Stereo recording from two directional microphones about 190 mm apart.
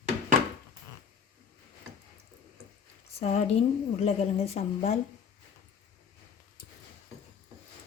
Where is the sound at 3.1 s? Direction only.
35° left (ahead or behind).